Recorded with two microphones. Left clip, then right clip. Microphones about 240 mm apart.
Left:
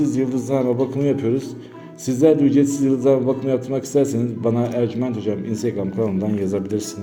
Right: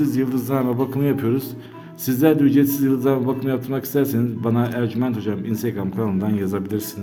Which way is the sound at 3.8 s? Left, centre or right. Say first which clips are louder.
Left 2 dB; centre.